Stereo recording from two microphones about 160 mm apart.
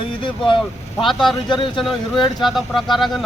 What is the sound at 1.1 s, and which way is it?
Speech, centre (ahead or behind).